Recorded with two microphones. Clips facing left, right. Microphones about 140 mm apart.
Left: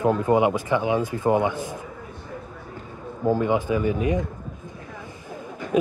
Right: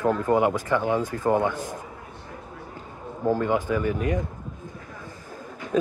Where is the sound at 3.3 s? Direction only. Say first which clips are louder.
Left 2 dB; 15° left (ahead or behind).